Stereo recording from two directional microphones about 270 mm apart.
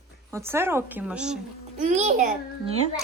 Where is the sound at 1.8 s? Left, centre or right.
Right.